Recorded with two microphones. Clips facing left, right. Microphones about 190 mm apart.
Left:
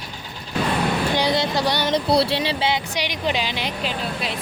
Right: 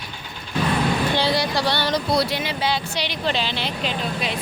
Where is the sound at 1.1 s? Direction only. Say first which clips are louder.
Left 1 dB; 20° left (ahead or behind).